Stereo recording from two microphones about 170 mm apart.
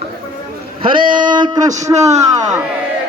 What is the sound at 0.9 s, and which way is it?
Speech, 30° right (ahead or behind).